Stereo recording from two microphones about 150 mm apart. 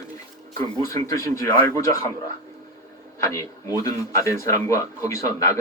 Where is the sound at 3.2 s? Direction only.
20° left (ahead or behind).